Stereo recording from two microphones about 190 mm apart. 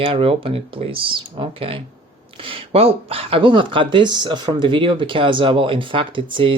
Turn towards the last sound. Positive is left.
turn(degrees=-25)  # may be behind; listen again after turning